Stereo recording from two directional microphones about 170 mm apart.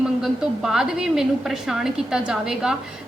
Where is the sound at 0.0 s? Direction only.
5° right (ahead or behind).